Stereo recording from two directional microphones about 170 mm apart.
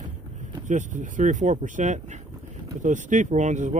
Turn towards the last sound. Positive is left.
turn(degrees=-45)  # may be behind; listen again after turning